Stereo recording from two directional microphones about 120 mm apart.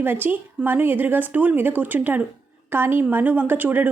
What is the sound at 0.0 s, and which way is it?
A woman's voice, 15° right (ahead or behind).